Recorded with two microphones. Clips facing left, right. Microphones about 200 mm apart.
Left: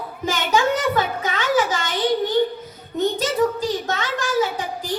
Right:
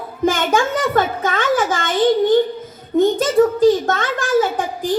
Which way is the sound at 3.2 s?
50° right (ahead or behind).